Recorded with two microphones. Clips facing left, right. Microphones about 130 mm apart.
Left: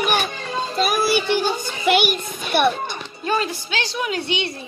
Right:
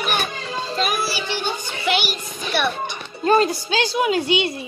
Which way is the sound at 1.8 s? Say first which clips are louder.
Left 5 dB; 50° left (ahead or behind).